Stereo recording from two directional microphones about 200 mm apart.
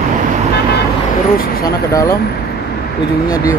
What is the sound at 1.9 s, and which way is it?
Speech, 15° left (ahead or behind).